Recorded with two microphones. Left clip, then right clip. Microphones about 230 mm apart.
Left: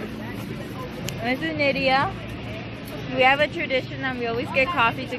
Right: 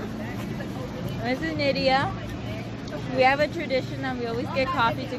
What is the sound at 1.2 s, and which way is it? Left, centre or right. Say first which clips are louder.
Speech: left 3 dB; centre.